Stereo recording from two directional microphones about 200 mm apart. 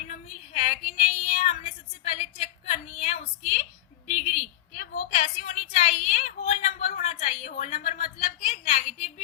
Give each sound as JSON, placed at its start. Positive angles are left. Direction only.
{"t": 0.1, "sound": "female singing", "side_deg": 35}